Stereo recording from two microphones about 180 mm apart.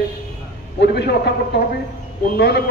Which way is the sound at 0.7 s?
70° left (ahead or behind).